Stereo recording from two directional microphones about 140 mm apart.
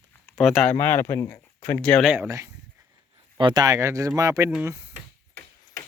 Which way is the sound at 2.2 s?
20° right (ahead or behind).